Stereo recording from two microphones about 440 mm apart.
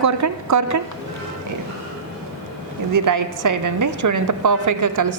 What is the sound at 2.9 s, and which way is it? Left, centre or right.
A woman's voice, right.